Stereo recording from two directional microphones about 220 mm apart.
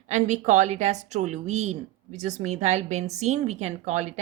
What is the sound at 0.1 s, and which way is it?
A woman's voice, 35° right (ahead or behind).